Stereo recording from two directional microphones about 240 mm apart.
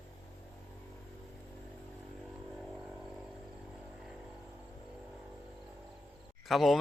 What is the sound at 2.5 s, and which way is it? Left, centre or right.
Vehicle, centre.